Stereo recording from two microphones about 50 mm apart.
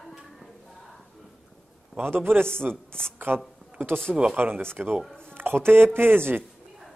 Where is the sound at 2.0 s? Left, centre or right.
Right.